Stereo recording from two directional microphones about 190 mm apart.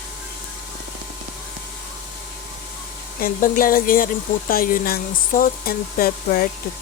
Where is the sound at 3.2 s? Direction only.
45° left (ahead or behind).